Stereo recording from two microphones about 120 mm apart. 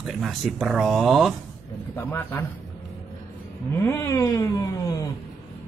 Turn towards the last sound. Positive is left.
turn(degrees=25)  # may be behind; listen again after turning